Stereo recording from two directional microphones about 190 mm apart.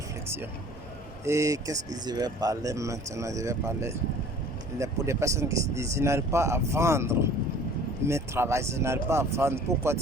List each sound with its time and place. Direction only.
1.2 s speech: 15° right (ahead or behind)